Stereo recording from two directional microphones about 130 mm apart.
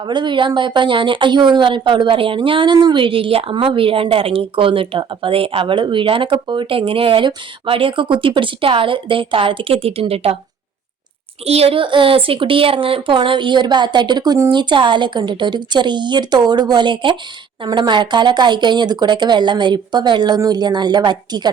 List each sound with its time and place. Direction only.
0.0 s a woman's voice: 35° right (ahead or behind)
11.4 s a woman's voice: 50° right (ahead or behind); by 21.5 s 35° right (ahead or behind)